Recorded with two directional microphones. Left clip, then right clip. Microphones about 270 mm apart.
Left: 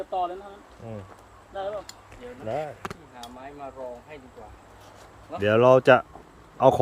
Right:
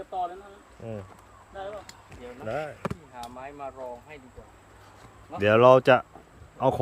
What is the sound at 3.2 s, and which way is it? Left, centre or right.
Chop, centre.